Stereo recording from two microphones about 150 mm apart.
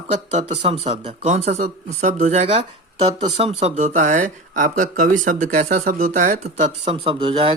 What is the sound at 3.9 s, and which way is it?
Speech, 55° right (ahead or behind).